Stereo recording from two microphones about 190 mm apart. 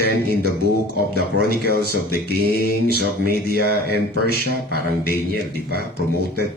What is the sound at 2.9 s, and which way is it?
Mantra, 55° right (ahead or behind).